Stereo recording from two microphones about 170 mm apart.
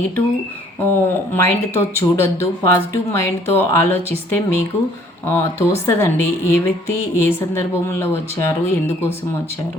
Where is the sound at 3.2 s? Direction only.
15° left (ahead or behind).